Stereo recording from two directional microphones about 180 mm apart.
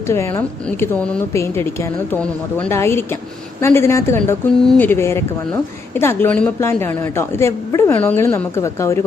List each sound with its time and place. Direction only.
0.1 s a woman's voice: 15° left (ahead or behind)